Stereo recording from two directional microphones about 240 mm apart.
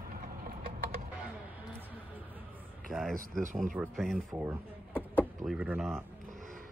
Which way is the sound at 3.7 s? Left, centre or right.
Centre.